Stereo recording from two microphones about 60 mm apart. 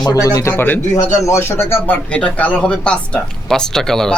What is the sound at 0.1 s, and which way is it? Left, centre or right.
Speech, left.